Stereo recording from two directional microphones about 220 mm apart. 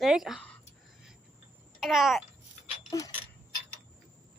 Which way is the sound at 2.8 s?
15° left (ahead or behind).